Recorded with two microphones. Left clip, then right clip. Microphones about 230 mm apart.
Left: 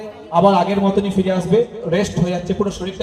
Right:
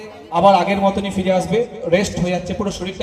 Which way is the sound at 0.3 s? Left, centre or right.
Right.